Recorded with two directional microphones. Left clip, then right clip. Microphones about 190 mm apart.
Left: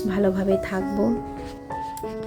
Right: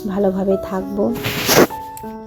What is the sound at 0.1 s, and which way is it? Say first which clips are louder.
Speech: right 5 dB; 15° right (ahead or behind).